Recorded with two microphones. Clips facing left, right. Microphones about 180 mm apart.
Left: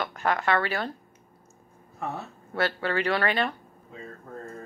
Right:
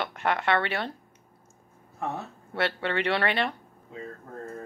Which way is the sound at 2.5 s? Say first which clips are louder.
Left 1 dB; 25° right (ahead or behind).